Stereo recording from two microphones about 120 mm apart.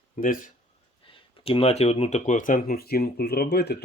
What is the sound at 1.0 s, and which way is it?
Speech, 45° left (ahead or behind).